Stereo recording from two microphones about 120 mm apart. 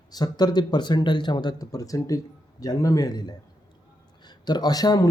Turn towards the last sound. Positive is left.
turn(degrees=30)  # may be behind; listen again after turning